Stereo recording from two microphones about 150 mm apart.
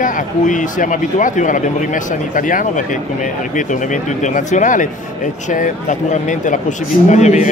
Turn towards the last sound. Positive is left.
turn(degrees=50)  # may be behind; listen again after turning